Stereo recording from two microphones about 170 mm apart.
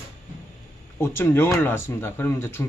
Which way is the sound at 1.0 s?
15° left (ahead or behind).